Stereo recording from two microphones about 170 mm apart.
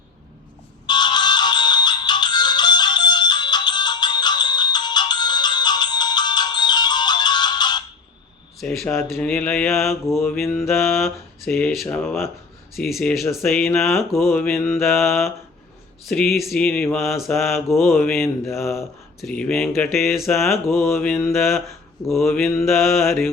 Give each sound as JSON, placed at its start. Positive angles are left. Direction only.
{"t": 0.9, "sound": "music", "side_deg": 25}
{"t": 8.5, "sound": "a sound", "side_deg": 0}
{"t": 8.8, "sound": "speech", "side_deg": 15}
{"t": 10.7, "sound": "speech", "side_deg": 15}
{"t": 12.7, "sound": "speech", "side_deg": 0}
{"t": 14.8, "sound": "speech", "side_deg": 0}
{"t": 17.8, "sound": "speech", "side_deg": 10}
{"t": 18.8, "sound": "speech", "side_deg": 5}
{"t": 20.1, "sound": "speech", "side_deg": 0}
{"t": 21.5, "sound": "a sound", "side_deg": 15}
{"t": 22.1, "sound": "speech", "side_deg": 0}
{"t": 22.4, "sound": "speech", "side_deg": 15}
{"t": 22.7, "sound": "speech", "side_deg": 0}